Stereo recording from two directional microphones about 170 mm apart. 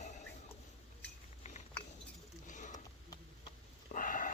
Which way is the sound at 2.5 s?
45° left (ahead or behind).